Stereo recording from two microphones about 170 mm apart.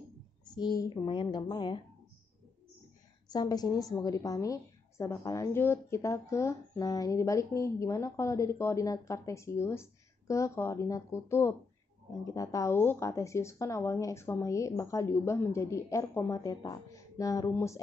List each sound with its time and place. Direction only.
0.6 s speech: 25° left (ahead or behind)
3.3 s a woman's voice: 25° left (ahead or behind)